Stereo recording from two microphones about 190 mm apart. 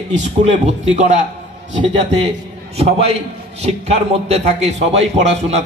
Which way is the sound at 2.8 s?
30° right (ahead or behind).